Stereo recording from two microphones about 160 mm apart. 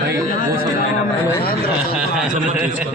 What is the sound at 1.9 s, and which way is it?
Speech, 5° right (ahead or behind).